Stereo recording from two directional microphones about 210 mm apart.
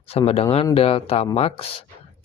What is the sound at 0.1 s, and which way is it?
Speech, 30° left (ahead or behind).